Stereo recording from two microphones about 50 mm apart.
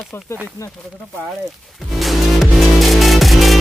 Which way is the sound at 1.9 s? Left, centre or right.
Centre.